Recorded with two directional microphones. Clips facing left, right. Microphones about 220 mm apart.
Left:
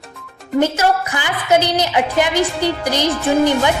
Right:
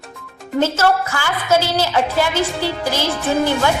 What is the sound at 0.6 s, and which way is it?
A woman's voice, 15° left (ahead or behind).